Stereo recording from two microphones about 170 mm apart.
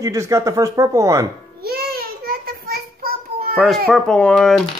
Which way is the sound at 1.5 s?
65° right (ahead or behind).